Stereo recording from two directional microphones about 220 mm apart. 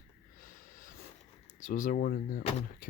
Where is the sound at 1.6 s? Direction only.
35° left (ahead or behind).